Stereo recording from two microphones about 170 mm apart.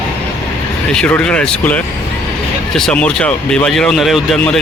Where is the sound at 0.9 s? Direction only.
5° left (ahead or behind).